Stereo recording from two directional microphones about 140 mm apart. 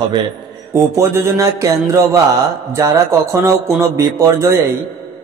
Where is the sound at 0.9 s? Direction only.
20° right (ahead or behind).